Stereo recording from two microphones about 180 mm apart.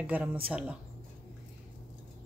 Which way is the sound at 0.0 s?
10° right (ahead or behind).